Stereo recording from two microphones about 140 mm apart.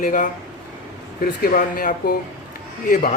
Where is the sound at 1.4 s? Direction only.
85° left.